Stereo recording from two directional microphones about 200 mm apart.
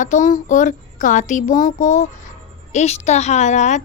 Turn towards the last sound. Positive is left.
turn(degrees=35)  # may be behind; listen again after turning